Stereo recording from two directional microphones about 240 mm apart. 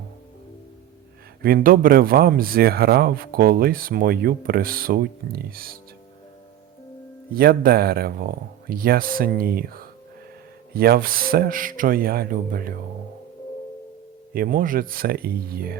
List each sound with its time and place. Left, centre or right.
1.4 s speech: right
7.3 s speech: right
14.3 s speech: right